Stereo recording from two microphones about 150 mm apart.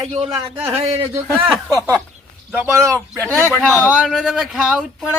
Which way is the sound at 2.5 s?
15° right (ahead or behind).